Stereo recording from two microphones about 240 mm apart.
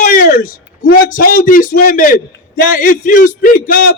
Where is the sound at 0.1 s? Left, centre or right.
Left.